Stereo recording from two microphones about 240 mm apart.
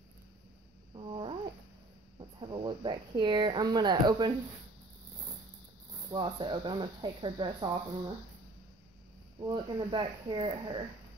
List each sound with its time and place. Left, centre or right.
0.9 s a sound: right
2.1 s speech: centre
6.0 s speech: centre
9.4 s speech: centre